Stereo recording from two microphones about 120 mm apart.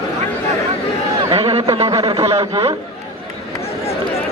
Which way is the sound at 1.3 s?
55° right (ahead or behind).